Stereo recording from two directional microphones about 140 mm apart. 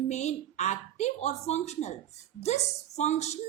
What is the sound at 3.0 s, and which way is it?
Speech, 55° left (ahead or behind).